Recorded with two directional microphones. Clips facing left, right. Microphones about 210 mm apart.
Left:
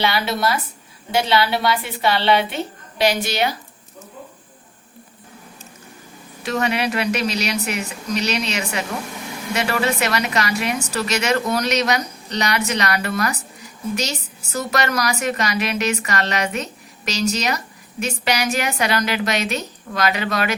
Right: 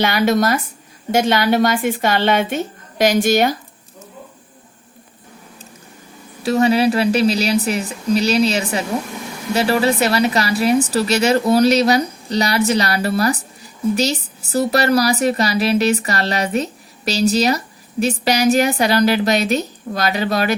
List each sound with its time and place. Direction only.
0.0 s a woman's voice: 45° right (ahead or behind)
6.4 s a woman's voice: 35° right (ahead or behind)